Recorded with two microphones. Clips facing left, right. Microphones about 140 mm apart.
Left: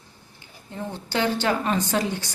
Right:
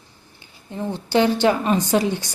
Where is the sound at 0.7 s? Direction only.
15° right (ahead or behind).